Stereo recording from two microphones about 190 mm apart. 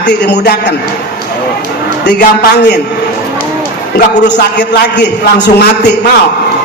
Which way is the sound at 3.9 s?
65° left (ahead or behind).